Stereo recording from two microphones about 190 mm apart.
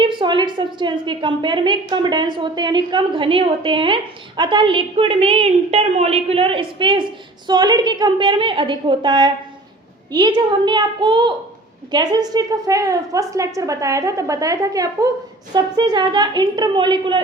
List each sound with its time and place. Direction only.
0.0 s a woman's voice: 25° right (ahead or behind)